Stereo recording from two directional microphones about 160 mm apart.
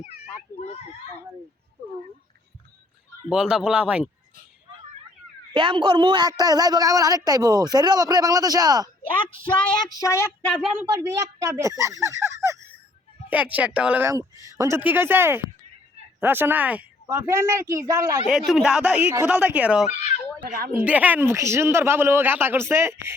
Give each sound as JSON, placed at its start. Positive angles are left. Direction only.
{"t": 0.0, "sound": "children playing", "side_deg": 40}
{"t": 3.2, "sound": "speech", "side_deg": -5}
{"t": 5.5, "sound": "a man's voice", "side_deg": -30}
{"t": 9.8, "sound": "child singing", "side_deg": 20}
{"t": 10.5, "sound": "speech", "side_deg": 0}
{"t": 10.8, "sound": "a woman's voice", "side_deg": -15}
{"t": 13.3, "sound": "a woman's voice", "side_deg": -10}
{"t": 14.1, "sound": "a woman's voice", "side_deg": -20}
{"t": 18.3, "sound": "a woman's voice", "side_deg": 0}
{"t": 19.9, "sound": "speech", "side_deg": 45}
{"t": 20.7, "sound": "a woman's voice", "side_deg": -10}